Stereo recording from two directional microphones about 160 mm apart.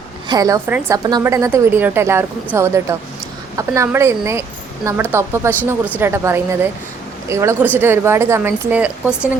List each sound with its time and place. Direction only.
0.3 s a woman's voice: 20° right (ahead or behind)